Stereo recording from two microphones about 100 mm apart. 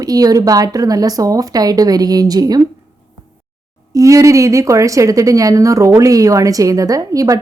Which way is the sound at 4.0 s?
35° right (ahead or behind).